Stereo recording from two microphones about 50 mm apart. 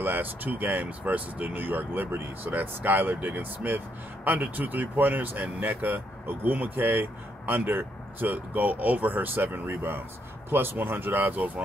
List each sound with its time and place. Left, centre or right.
0.0 s speech: right